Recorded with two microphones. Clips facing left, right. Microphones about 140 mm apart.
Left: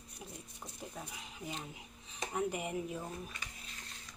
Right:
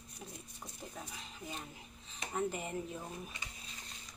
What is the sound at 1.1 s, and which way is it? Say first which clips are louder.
Speech: left 2 dB; 15° left (ahead or behind).